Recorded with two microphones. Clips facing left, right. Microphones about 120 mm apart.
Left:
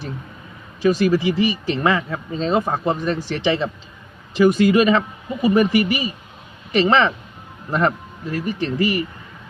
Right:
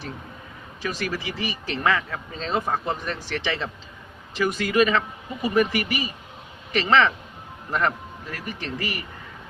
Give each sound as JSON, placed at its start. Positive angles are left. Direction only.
{"t": 0.8, "sound": "speech", "side_deg": 20}
{"t": 2.6, "sound": "speech", "side_deg": 30}